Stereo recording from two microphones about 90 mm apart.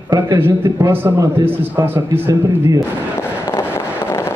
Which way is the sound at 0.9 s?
25° right (ahead or behind).